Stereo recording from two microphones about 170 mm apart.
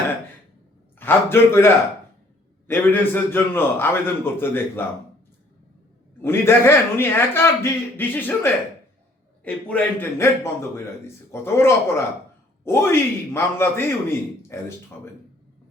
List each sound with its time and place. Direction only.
0.9 s a man's voice: 15° left (ahead or behind)
6.2 s a man's voice: 15° left (ahead or behind)
9.4 s a man's voice: 10° left (ahead or behind)